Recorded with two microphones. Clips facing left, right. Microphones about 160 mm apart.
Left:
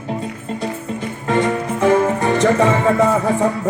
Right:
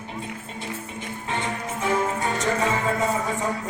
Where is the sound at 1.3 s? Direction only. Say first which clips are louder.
Left 12 dB; 90° left.